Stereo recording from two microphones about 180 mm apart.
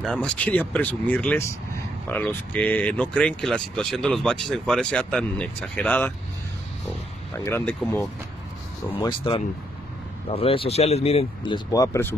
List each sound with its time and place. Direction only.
0.0 s speech: 5° left (ahead or behind)
7.3 s speech: 15° left (ahead or behind)
9.0 s speech: 25° left (ahead or behind)